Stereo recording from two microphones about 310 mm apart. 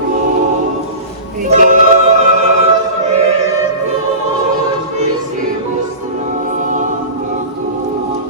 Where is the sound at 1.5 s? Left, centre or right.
Right.